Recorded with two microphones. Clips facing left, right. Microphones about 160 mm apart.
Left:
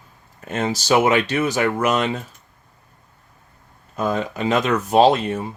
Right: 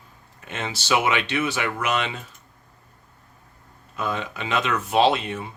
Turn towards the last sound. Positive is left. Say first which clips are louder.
# left 5 dB
turn(degrees=40)  # may be behind; listen again after turning